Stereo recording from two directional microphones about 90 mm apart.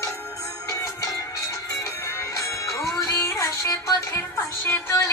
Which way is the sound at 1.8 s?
35° left (ahead or behind).